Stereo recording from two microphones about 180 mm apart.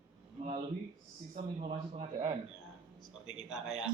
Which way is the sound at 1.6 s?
35° right (ahead or behind).